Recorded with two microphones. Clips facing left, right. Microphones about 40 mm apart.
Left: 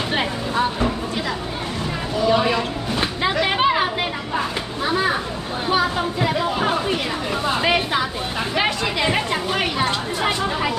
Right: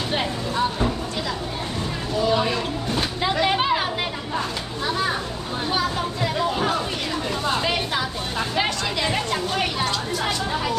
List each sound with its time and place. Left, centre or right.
0.1 s vehicle: centre
3.2 s a sound: centre
7.6 s music: centre
9.8 s speech: left